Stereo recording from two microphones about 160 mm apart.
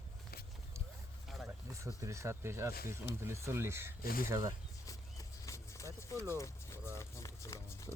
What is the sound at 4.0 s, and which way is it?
Speech, 65° left (ahead or behind).